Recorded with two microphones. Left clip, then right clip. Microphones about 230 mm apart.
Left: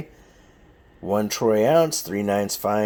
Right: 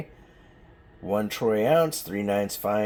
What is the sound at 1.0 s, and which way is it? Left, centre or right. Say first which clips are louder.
Speech: left 4 dB; left.